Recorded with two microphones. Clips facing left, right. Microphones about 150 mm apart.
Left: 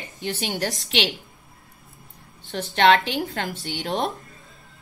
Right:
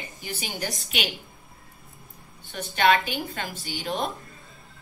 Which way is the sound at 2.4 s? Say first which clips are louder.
Left 4 dB; 75° left (ahead or behind).